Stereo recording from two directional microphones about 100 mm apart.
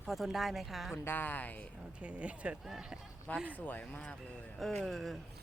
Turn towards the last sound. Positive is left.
turn(degrees=0)  # may be behind; listen again after turning